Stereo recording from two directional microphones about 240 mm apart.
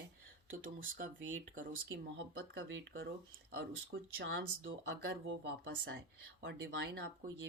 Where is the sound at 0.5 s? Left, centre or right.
Right.